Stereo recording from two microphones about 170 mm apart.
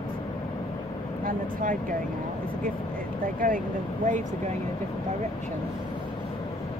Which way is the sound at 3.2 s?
55° right (ahead or behind).